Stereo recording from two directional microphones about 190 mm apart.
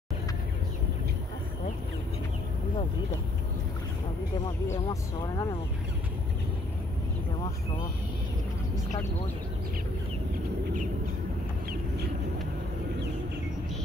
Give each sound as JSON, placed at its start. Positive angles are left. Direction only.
{"t": 4.6, "sound": "speech", "side_deg": 20}